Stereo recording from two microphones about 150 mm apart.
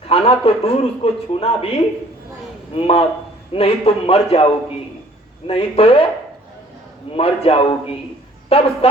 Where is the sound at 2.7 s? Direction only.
40° left (ahead or behind).